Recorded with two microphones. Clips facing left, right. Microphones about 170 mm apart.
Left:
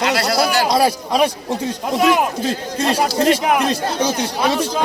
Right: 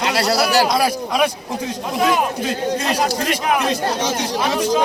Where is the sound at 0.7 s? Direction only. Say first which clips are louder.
Left 2 dB; 30° left (ahead or behind).